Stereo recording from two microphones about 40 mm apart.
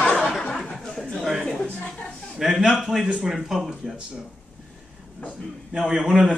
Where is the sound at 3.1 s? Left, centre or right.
Right.